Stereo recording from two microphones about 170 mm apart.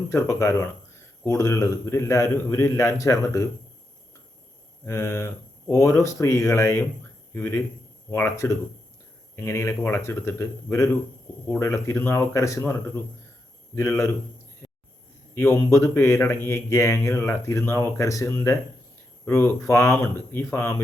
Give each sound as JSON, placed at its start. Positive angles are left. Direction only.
{"t": 0.1, "sound": "speech", "side_deg": 15}
{"t": 4.9, "sound": "speech", "side_deg": 15}
{"t": 13.7, "sound": "speech", "side_deg": 15}
{"t": 15.4, "sound": "speech", "side_deg": 15}